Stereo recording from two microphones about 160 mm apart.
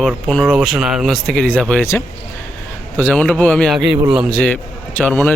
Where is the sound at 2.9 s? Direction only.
10° left (ahead or behind).